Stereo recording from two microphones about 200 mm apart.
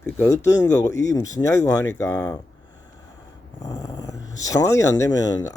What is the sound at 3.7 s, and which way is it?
Speech, 20° left (ahead or behind).